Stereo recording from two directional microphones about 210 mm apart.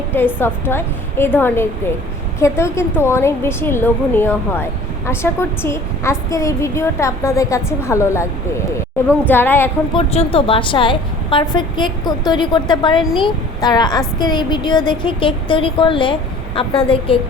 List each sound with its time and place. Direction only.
0.3 s a woman's voice: 10° left (ahead or behind)
9.9 s a woman's voice: 30° left (ahead or behind)
13.0 s speech: centre (ahead or behind)
13.2 s a woman's voice: 20° left (ahead or behind)